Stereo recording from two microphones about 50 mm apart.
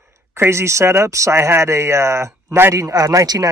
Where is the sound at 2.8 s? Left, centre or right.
Right.